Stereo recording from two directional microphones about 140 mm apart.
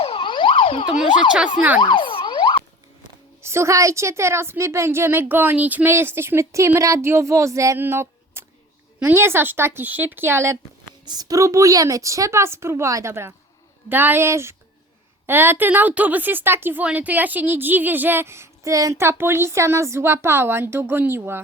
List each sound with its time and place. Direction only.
0.0 s emergency vehicle: 40° left (ahead or behind)
3.4 s a woman's voice: 20° right (ahead or behind)
11.0 s a woman's voice: 30° right (ahead or behind)